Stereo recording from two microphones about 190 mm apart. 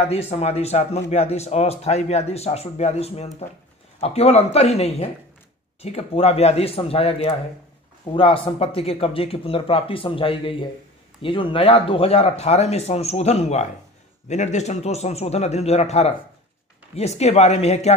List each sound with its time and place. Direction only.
0.1 s speech: 35° left (ahead or behind)